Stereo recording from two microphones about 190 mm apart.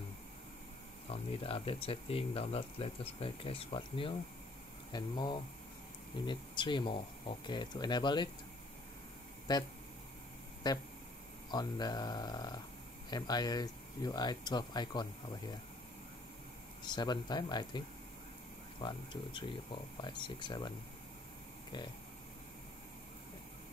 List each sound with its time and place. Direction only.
1.1 s speech: 30° left (ahead or behind)
9.5 s speech: 20° left (ahead or behind)
10.6 s speech: 20° left (ahead or behind)
16.8 s speech: 25° left (ahead or behind)